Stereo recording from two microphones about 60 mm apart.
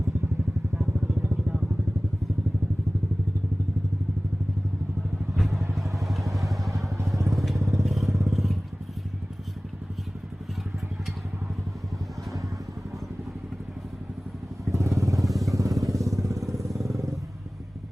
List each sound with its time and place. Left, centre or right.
5.4 s vehicle: centre
6.9 s vehicle: right
7.3 s vehicle: centre
7.6 s vehicle: right
14.7 s vehicle: right
15.3 s motorcycle: centre
15.5 s motorcycle: right
16.0 s vehicle: right